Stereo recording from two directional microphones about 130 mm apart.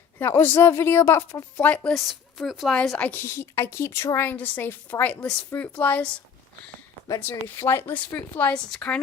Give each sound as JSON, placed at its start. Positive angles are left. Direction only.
{"t": 0.2, "sound": "a woman's voice", "side_deg": 15}
{"t": 3.1, "sound": "a woman's voice", "side_deg": 20}
{"t": 7.2, "sound": "a woman's voice", "side_deg": 15}